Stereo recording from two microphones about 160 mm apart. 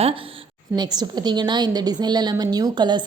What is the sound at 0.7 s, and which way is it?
A woman's voice, 25° right (ahead or behind).